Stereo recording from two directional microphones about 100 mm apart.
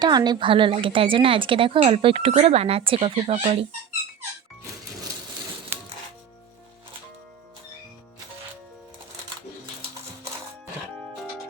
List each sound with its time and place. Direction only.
0.0 s a woman's voice: 45° right (ahead or behind); by 3.7 s 85° right
5.7 s music: 20° right (ahead or behind)